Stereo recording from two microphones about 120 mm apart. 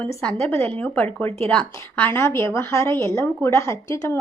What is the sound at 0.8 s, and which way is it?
A woman's voice, 15° left (ahead or behind).